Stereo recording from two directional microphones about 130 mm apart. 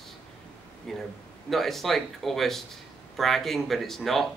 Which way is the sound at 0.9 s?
Centre (ahead or behind).